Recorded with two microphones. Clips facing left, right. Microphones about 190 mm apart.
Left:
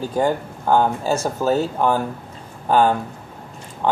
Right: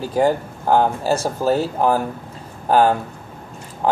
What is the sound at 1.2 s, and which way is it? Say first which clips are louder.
Speech: right 1 dB; 35° right (ahead or behind).